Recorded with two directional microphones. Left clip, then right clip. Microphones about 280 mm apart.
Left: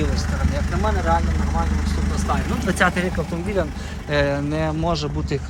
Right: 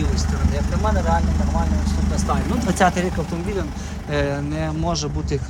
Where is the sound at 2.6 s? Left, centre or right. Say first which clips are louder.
Right 1 dB; right.